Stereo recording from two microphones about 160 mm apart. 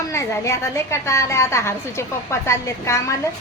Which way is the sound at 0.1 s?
20° left (ahead or behind).